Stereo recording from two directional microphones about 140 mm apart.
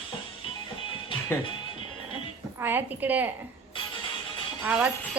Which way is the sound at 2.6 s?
15° right (ahead or behind).